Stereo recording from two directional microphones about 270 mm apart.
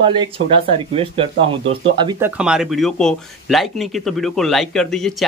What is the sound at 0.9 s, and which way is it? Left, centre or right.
Speech, centre.